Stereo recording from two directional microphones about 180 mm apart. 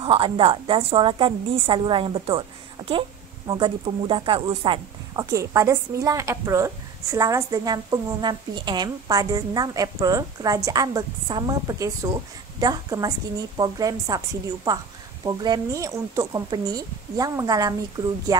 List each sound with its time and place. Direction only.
0.0 s a woman's voice: 30° right (ahead or behind)